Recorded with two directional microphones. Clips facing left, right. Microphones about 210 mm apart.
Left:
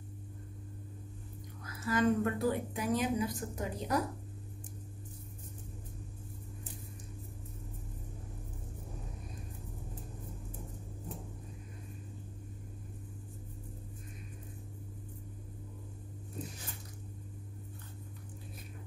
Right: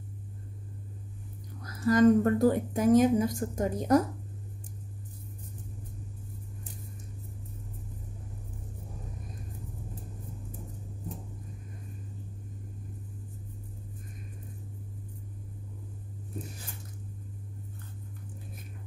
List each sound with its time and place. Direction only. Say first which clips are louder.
1.6 s speech: right 9 dB; 40° right (ahead or behind)